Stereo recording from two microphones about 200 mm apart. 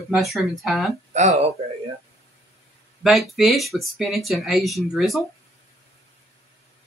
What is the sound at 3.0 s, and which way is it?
Speech, centre (ahead or behind).